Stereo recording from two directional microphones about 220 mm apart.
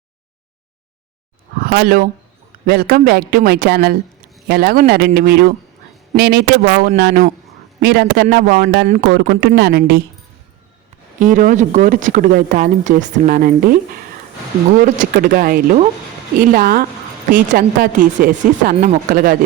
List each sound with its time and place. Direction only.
1.6 s speech: 45° right (ahead or behind)
11.2 s speech: 35° right (ahead or behind)